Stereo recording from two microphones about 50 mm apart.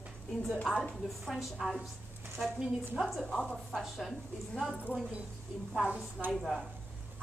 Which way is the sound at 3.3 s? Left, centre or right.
Centre.